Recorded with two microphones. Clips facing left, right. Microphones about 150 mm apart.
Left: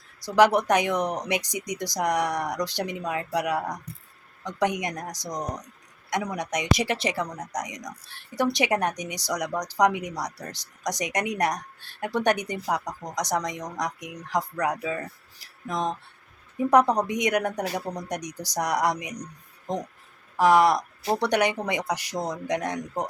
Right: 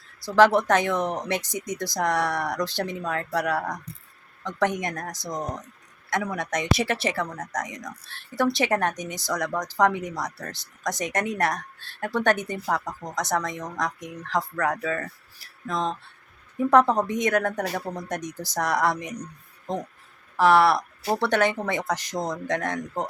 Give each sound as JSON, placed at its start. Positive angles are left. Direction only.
{"t": 0.3, "sound": "speech", "side_deg": 15}